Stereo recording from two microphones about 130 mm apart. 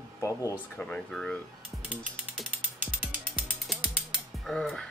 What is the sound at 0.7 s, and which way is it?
Speech, 10° left (ahead or behind).